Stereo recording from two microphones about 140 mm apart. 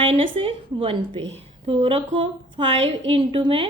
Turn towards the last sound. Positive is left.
turn(degrees=-40)  # may be behind; listen again after turning